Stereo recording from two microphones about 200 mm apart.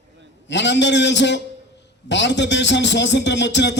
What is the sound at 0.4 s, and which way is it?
A man's voice, 60° left (ahead or behind).